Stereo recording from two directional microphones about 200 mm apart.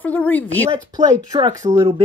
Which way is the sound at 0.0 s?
10° left (ahead or behind).